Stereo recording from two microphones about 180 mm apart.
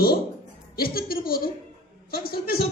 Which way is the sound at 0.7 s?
55° left (ahead or behind).